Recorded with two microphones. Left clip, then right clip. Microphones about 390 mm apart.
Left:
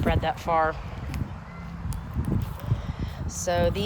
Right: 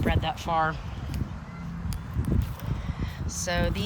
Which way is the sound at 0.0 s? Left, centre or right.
Centre.